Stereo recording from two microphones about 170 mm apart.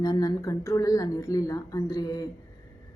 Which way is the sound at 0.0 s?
20° left (ahead or behind).